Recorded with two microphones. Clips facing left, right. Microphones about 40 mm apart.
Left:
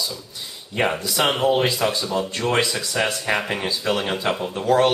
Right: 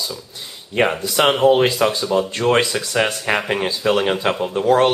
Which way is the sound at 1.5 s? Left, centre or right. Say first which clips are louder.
Right 4 dB; right.